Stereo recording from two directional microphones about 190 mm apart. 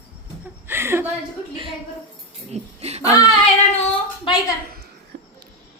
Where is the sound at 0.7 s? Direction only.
10° right (ahead or behind).